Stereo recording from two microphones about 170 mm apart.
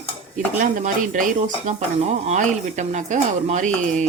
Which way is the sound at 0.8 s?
50° right (ahead or behind).